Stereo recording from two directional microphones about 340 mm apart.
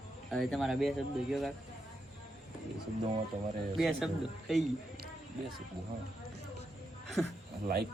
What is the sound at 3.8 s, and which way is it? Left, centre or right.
Speech, centre.